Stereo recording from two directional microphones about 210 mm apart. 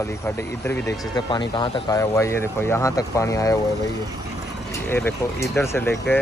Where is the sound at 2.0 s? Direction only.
15° left (ahead or behind).